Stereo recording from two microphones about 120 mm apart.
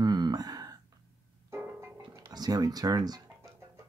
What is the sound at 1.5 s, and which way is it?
Music, 20° right (ahead or behind).